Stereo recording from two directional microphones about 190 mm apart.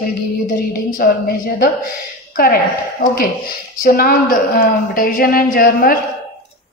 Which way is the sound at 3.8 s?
50° left (ahead or behind).